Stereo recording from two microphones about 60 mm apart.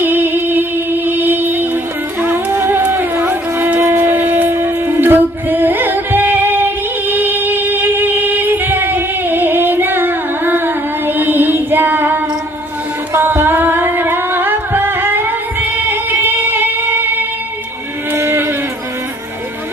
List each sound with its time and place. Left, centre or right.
0.0 s music: right
3.8 s shofar: right
4.1 s music: right
18.1 s a sound: right